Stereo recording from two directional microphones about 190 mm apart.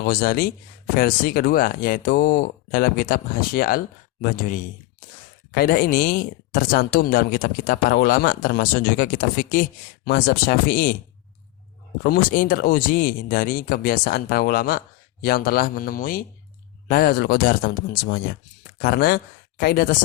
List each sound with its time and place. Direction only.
0.0 s speech: 50° left (ahead or behind)
12.0 s speech: 45° left (ahead or behind)
18.8 s speech: 50° left (ahead or behind)